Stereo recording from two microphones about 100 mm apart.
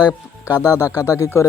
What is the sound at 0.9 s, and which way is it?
Speech, 30° left (ahead or behind).